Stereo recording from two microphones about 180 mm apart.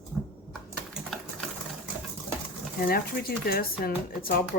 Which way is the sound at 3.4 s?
55° left (ahead or behind).